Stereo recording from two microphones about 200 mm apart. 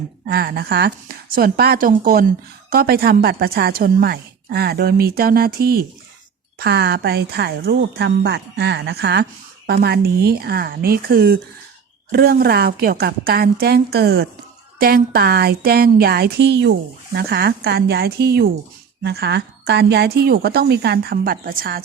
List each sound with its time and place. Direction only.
0.3 s a woman's voice: 50° right (ahead or behind)